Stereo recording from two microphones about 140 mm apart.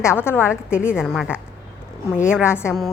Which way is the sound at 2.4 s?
20° left (ahead or behind).